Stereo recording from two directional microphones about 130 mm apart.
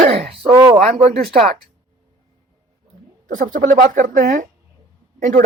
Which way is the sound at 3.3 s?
90° right.